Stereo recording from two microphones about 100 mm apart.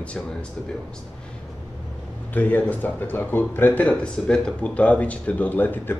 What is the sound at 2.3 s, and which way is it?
Speech, 15° left (ahead or behind).